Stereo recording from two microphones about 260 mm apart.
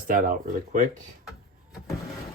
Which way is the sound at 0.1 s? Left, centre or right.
Right.